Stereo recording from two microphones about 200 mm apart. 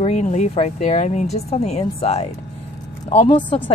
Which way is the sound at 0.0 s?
35° left (ahead or behind).